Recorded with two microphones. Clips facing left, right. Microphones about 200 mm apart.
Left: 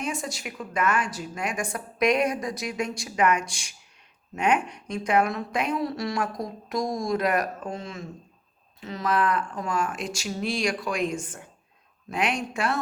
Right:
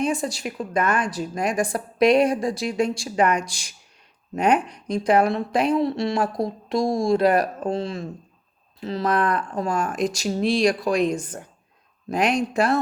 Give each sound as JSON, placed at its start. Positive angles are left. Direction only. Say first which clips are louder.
{"t": 0.0, "sound": "a woman's voice", "louder": "right 7 dB", "side_deg": -35}